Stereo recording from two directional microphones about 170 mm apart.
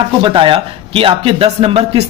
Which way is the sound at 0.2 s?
30° right (ahead or behind).